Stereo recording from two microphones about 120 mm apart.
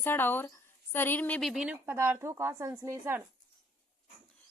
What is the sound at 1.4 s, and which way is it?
Speech, 5° right (ahead or behind).